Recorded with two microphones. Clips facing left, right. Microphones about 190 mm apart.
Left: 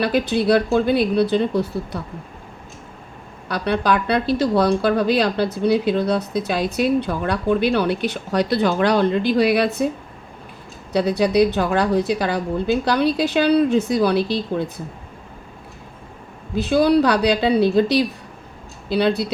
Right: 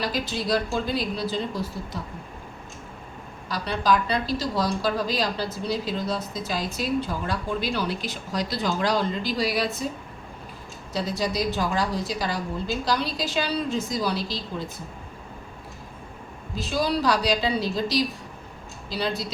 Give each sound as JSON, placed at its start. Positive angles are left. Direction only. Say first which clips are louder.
{"t": 0.0, "sound": "a woman's voice", "louder": "left 9 dB", "side_deg": 60}
{"t": 3.5, "sound": "a woman's voice", "louder": "left 4 dB", "side_deg": 60}
{"t": 10.9, "sound": "a woman's voice", "louder": "left 10 dB", "side_deg": 65}
{"t": 16.6, "sound": "a woman's voice", "louder": "left 10 dB", "side_deg": 60}